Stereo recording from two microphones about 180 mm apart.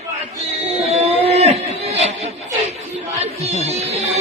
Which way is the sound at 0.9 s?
35° right (ahead or behind).